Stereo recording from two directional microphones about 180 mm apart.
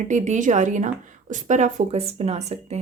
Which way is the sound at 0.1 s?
45° right (ahead or behind).